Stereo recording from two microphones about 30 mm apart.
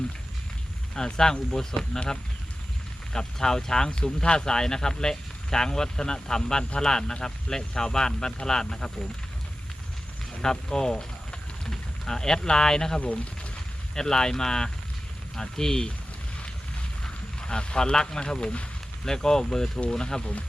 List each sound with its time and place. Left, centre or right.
0.9 s speech: left
3.1 s speech: centre
3.9 s speech: left
10.4 s speech: left
13.0 s speech: left
13.9 s speech: left
17.0 s a sound: left
19.0 s speech: centre